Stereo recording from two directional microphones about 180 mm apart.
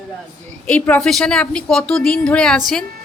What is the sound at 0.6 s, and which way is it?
Speech, 10° left (ahead or behind).